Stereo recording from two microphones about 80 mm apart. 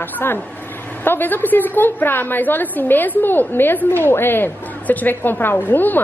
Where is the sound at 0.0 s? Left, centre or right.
Left.